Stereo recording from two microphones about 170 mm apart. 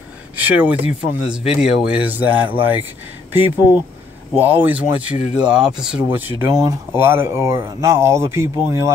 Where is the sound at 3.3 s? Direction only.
10° right (ahead or behind).